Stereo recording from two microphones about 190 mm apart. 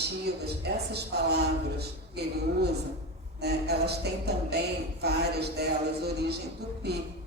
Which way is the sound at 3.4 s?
60° right (ahead or behind).